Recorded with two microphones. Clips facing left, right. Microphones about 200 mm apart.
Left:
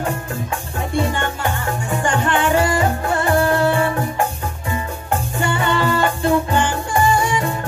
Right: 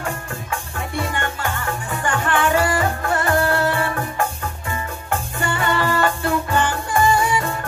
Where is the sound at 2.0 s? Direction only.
25° left (ahead or behind).